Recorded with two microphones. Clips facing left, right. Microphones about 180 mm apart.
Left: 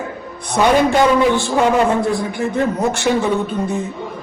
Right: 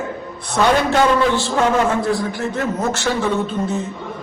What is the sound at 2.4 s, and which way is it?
A man's voice, 15° left (ahead or behind).